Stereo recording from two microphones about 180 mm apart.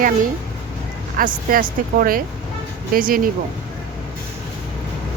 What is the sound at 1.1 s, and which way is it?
Speech, 50° right (ahead or behind).